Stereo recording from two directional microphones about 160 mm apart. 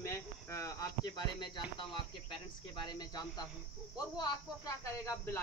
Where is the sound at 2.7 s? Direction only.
25° left (ahead or behind).